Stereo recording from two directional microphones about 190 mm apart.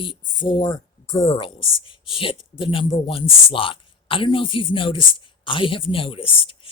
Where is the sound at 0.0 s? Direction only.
25° left (ahead or behind).